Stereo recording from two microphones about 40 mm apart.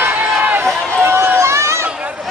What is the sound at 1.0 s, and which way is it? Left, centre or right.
Run, right.